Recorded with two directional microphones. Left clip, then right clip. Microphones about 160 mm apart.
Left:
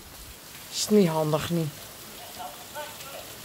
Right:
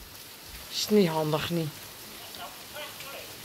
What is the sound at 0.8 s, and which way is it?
Speech, 20° left (ahead or behind).